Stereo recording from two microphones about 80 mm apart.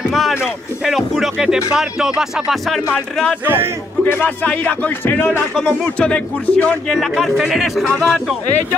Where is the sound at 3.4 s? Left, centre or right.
Right.